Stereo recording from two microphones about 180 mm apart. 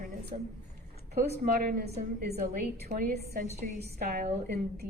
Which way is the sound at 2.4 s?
40° right (ahead or behind).